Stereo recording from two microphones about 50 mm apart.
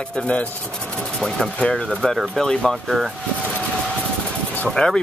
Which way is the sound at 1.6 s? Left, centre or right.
Centre.